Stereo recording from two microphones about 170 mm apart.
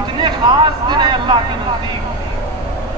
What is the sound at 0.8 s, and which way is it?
Speech, 25° right (ahead or behind).